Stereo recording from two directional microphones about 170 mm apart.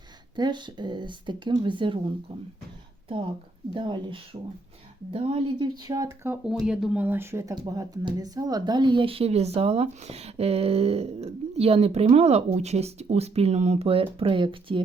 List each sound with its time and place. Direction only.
0.3 s speech: 25° right (ahead or behind)
3.8 s speech: 30° right (ahead or behind)